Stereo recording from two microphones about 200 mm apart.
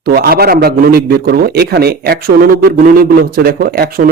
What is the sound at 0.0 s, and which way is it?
A man's voice, 50° right (ahead or behind).